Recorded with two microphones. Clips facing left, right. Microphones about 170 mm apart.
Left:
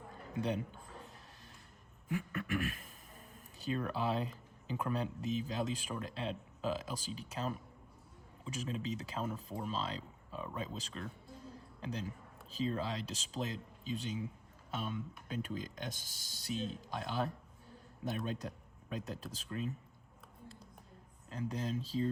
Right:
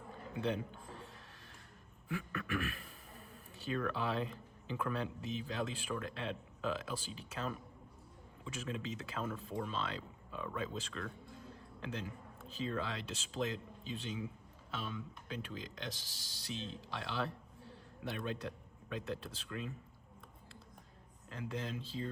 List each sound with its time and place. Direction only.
0.4 s a man's voice: 40° left (ahead or behind)
2.3 s a man's voice: 35° left (ahead or behind)
18.0 s speech: 40° left (ahead or behind)
21.3 s speech: 35° left (ahead or behind)